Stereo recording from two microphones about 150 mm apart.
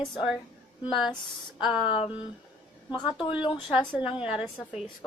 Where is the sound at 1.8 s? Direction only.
35° left (ahead or behind).